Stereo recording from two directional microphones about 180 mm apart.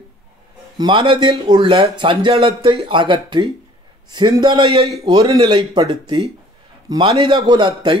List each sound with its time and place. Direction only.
0.7 s a man's voice: 25° right (ahead or behind)